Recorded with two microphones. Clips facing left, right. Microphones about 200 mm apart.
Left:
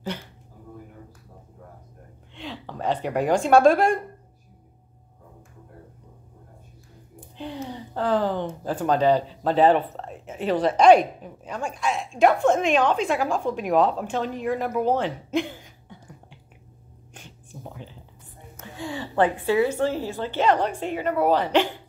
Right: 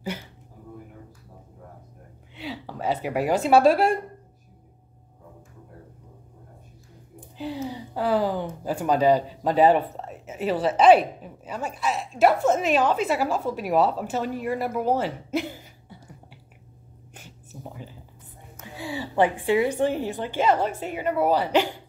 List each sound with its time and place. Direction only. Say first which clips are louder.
2.3 s speech: right 1 dB; 5° right (ahead or behind)
7.3 s speech: right 2 dB; 5° right (ahead or behind)
17.1 s a sound: left 1 dB; 5° right (ahead or behind)
18.9 s speech: even; 10° right (ahead or behind)